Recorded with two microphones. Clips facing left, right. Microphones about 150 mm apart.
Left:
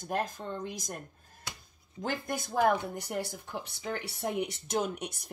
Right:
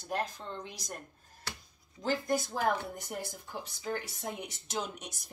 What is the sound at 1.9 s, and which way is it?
Speech, 55° left (ahead or behind).